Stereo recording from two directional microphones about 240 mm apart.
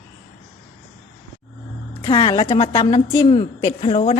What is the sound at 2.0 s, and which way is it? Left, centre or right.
A woman's voice, left.